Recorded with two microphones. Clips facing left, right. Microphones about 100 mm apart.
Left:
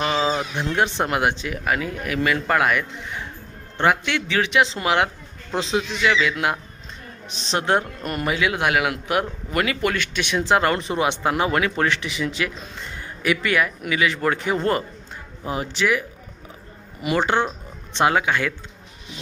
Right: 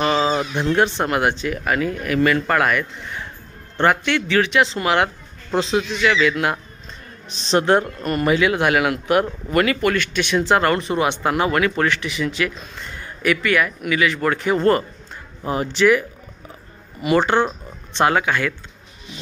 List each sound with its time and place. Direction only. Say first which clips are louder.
0.0 s a sound: right 3 dB; 5° left (ahead or behind)
1.0 s speech: right 2 dB; 15° left (ahead or behind)
7.5 s speech: right 5 dB; 10° left (ahead or behind)